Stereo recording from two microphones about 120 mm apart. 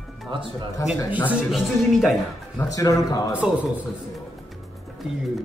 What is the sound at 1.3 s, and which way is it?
Speech, 5° right (ahead or behind).